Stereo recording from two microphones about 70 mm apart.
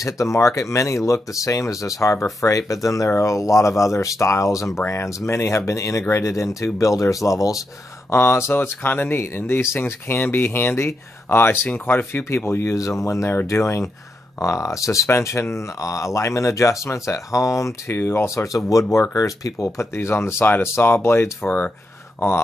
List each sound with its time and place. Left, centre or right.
0.0 s speech: left
8.1 s speech: left
12.7 s speech: left
17.9 s speech: left
21.5 s speech: left